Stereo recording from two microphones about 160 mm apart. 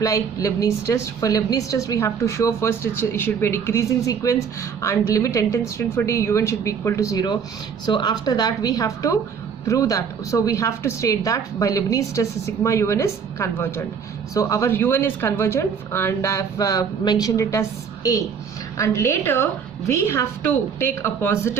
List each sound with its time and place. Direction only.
0.0 s a woman's voice: 20° left (ahead or behind)